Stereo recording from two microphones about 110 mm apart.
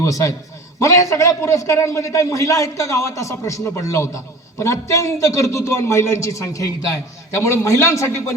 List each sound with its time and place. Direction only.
0.0 s a man's voice: 30° left (ahead or behind)